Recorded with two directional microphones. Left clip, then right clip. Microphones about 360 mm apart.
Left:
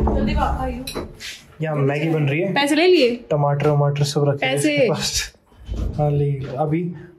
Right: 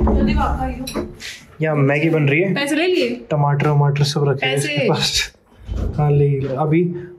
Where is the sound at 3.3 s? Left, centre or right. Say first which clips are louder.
Even; centre.